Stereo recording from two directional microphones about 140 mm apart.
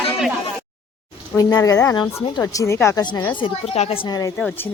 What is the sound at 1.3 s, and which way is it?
Speech, 25° left (ahead or behind).